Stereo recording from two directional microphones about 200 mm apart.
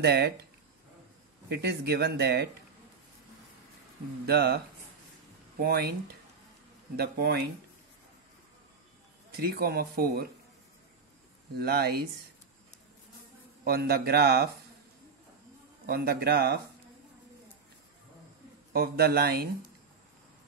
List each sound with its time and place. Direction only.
0.0 s speech: 55° right (ahead or behind)
1.5 s speech: 55° right (ahead or behind)
4.3 s speech: 55° right (ahead or behind)
5.6 s speech: 50° right (ahead or behind)
7.0 s speech: 50° right (ahead or behind)
9.4 s speech: 50° right (ahead or behind)
11.5 s speech: 50° right (ahead or behind)
13.7 s speech: 50° right (ahead or behind)
15.9 s speech: 50° right (ahead or behind)
18.7 s speech: 50° right (ahead or behind)